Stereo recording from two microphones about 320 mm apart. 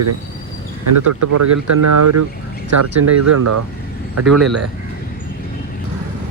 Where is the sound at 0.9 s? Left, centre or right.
Right.